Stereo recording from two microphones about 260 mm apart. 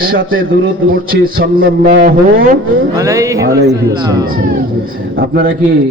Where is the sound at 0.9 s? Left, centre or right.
Right.